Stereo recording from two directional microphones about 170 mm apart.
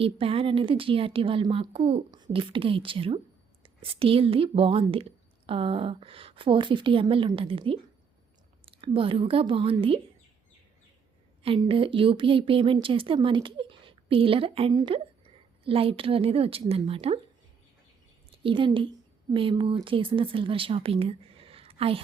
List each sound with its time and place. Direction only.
0.0 s a woman's voice: 35° right (ahead or behind)
11.4 s a woman's voice: 30° right (ahead or behind)
18.4 s a woman's voice: 30° right (ahead or behind)